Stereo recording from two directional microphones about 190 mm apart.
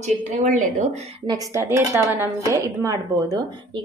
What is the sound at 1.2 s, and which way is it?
A woman's voice, 20° right (ahead or behind).